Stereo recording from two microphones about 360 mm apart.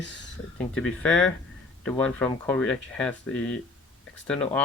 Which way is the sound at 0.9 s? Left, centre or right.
Centre.